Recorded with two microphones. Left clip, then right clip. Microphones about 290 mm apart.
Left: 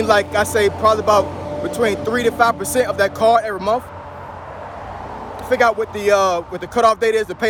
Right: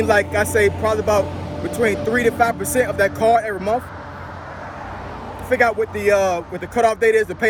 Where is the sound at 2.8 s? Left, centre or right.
Centre.